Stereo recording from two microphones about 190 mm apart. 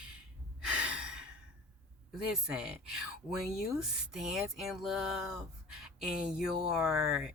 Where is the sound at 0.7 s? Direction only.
5° right (ahead or behind).